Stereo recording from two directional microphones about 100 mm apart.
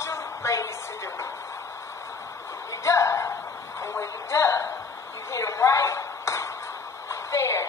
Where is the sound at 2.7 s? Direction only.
30° left (ahead or behind).